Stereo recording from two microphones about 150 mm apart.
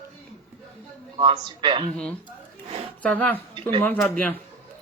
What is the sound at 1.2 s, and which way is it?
Speech, 35° right (ahead or behind).